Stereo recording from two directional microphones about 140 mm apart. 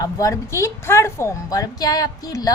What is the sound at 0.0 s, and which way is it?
A woman's voice, 25° left (ahead or behind).